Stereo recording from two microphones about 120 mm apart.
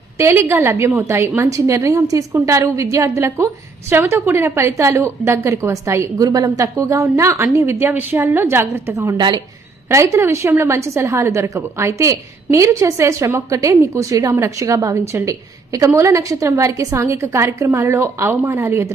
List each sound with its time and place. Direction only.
0.2 s a woman's voice: 20° right (ahead or behind)
9.1 s a woman's voice: 40° right (ahead or behind)
9.9 s a woman's voice: 25° right (ahead or behind)